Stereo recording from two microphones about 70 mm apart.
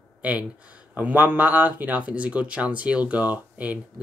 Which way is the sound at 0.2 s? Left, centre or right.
Centre.